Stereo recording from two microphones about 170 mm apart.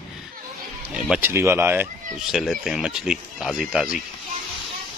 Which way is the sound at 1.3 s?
15° right (ahead or behind).